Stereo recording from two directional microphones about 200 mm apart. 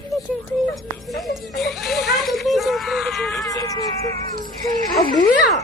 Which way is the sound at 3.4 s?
15° left (ahead or behind).